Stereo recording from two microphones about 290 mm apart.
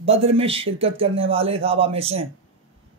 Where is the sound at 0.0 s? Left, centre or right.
Centre.